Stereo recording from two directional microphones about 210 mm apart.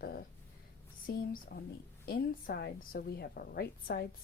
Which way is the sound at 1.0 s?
45° left (ahead or behind).